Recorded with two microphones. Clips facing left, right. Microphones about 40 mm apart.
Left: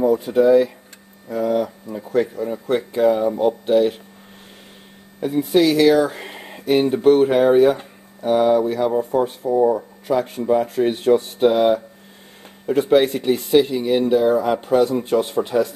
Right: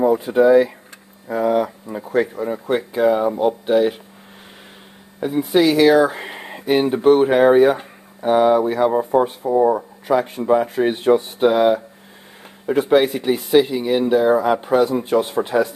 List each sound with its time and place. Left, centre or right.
0.0 s speech: centre
2.9 s speech: centre
5.2 s speech: centre
9.6 s speech: right
10.0 s speech: centre